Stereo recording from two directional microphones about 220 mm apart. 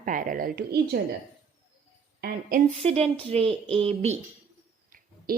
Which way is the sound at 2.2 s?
40° right (ahead or behind).